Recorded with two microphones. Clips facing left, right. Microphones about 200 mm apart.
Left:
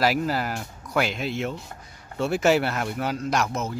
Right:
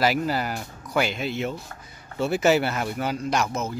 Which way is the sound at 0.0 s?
Centre (ahead or behind).